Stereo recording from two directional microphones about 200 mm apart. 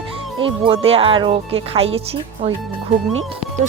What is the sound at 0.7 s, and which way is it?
Speech, 30° right (ahead or behind).